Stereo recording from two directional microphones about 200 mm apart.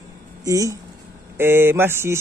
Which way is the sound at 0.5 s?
15° right (ahead or behind).